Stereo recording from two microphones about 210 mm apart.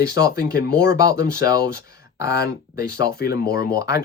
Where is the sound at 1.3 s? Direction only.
15° right (ahead or behind).